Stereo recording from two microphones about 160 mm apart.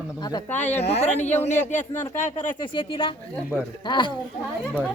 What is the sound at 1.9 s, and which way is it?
Speech, 15° left (ahead or behind).